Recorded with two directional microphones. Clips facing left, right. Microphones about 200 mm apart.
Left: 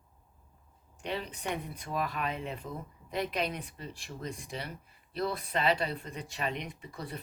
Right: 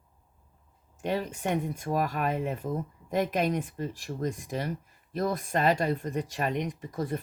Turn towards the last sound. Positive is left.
turn(degrees=-45)  # may be behind; listen again after turning